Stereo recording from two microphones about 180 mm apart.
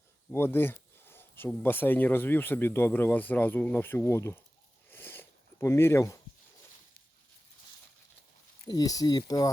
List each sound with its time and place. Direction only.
0.3 s speech: 10° left (ahead or behind)
4.9 s a sound: 10° left (ahead or behind)
8.6 s speech: 20° left (ahead or behind)